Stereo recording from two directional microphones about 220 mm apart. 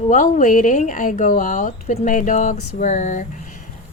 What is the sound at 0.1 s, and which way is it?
Speech, 35° left (ahead or behind).